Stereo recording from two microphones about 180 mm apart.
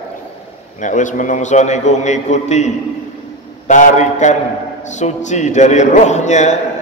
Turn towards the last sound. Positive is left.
turn(degrees=40)  # may be behind; listen again after turning